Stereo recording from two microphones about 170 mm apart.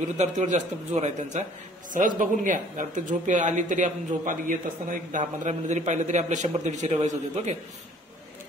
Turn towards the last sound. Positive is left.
turn(degrees=-45)  # may be behind; listen again after turning